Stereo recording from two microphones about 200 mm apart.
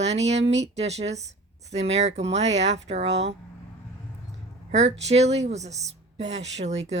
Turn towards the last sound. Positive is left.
turn(degrees=-35)  # may be behind; listen again after turning